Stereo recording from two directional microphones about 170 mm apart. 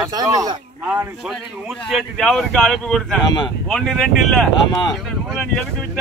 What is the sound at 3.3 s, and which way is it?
Speech, 25° left (ahead or behind).